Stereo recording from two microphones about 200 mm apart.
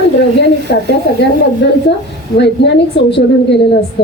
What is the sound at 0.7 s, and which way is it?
Speech, 50° left (ahead or behind).